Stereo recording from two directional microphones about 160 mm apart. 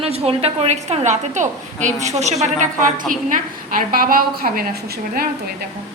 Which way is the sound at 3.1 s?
55° right (ahead or behind).